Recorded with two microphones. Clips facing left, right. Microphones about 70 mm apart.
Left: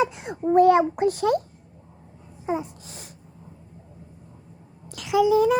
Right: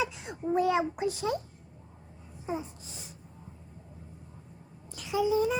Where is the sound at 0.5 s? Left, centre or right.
Left.